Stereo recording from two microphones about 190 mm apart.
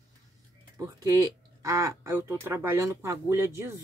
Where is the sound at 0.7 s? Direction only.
15° right (ahead or behind).